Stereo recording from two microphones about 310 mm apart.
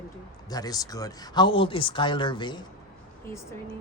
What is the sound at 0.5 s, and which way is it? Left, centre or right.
Speech, centre.